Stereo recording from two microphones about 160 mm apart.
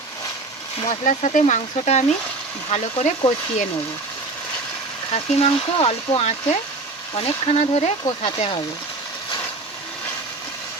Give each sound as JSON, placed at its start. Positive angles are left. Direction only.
{"t": 0.9, "sound": "speech", "side_deg": 50}
{"t": 5.1, "sound": "speech", "side_deg": 40}